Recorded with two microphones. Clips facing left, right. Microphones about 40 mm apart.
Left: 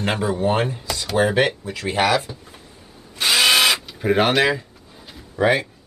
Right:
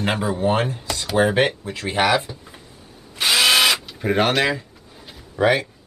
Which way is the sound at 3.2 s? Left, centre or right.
Centre.